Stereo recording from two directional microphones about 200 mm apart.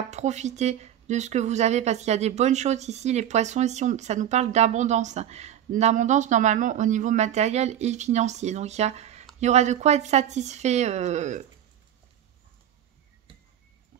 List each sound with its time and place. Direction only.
0.1 s speech: 35° right (ahead or behind)